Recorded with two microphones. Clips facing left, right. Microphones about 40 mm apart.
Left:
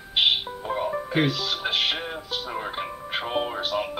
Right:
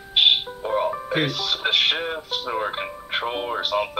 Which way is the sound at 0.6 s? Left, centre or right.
Right.